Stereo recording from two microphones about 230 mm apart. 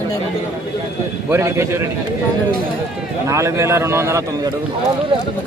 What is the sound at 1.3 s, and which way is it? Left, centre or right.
Speech, centre.